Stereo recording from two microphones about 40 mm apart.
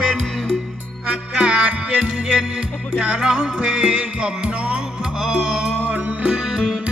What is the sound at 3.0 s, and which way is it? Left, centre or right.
Music, right.